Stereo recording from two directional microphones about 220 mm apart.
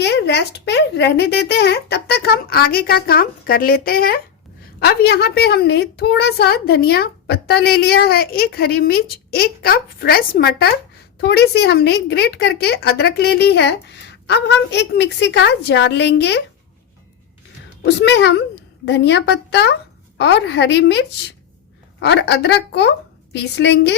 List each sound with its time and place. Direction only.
0.0 s a woman's voice: 50° left (ahead or behind)
17.8 s a woman's voice: 50° left (ahead or behind)